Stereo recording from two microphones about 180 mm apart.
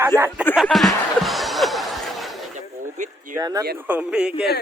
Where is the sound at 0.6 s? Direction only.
Centre (ahead or behind).